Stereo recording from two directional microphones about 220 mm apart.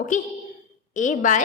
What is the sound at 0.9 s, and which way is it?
Speech, 35° left (ahead or behind).